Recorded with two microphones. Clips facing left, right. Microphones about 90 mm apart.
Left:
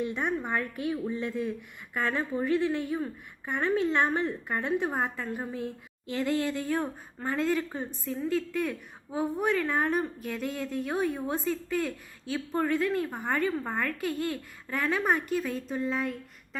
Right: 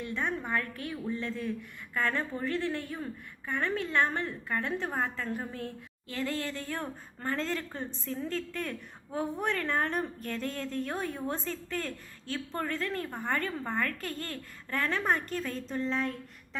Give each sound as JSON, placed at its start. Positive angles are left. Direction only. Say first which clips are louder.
{"t": 0.0, "sound": "a woman's voice", "louder": "left 4 dB", "side_deg": 15}